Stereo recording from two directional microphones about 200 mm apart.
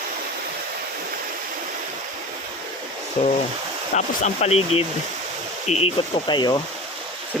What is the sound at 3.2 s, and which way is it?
Speech, 35° left (ahead or behind).